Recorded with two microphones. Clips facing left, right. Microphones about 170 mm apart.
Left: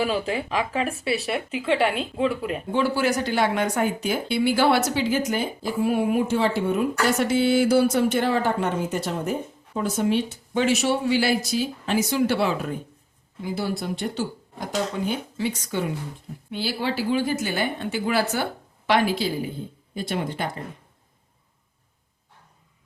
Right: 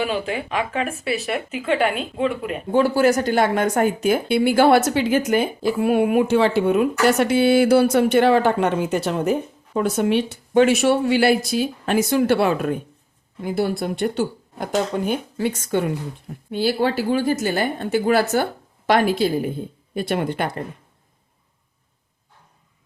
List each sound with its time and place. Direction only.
0.0 s speech: 35° left (ahead or behind)
2.7 s speech: 45° right (ahead or behind); by 20.5 s 60° right (ahead or behind)